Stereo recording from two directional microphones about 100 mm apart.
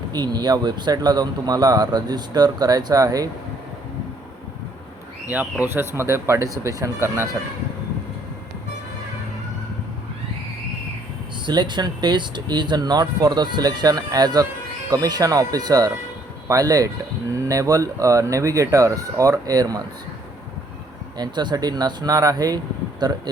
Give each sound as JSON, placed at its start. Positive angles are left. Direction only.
{"t": 0.1, "sound": "speech", "side_deg": -45}
{"t": 5.3, "sound": "speech", "side_deg": -15}
{"t": 11.4, "sound": "speech", "side_deg": -50}
{"t": 21.2, "sound": "speech", "side_deg": -45}